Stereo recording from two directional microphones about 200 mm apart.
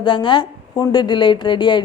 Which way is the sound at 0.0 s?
25° left (ahead or behind).